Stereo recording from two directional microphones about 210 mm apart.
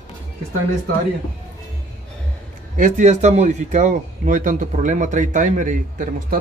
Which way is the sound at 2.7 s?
35° right (ahead or behind).